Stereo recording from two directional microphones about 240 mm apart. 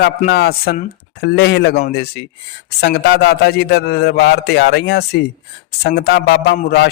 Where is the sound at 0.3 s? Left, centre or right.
Left.